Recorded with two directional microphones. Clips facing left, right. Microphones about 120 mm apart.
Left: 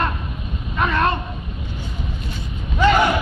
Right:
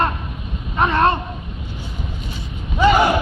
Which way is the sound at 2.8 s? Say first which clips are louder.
Right 2 dB; 10° right (ahead or behind).